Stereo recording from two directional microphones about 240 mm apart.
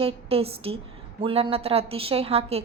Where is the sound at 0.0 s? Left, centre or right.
Right.